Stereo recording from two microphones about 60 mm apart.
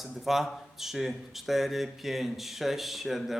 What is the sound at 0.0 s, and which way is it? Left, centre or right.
Speech, centre.